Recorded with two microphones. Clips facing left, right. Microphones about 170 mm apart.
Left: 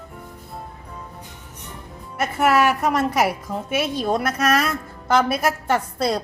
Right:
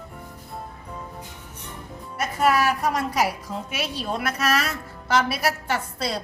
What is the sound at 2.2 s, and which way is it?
A woman's voice, 70° left (ahead or behind).